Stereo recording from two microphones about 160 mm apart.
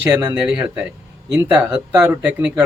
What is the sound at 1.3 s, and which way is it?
Speech, 20° right (ahead or behind).